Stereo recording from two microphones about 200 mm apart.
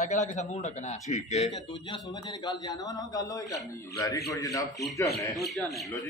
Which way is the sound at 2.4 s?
20° left (ahead or behind).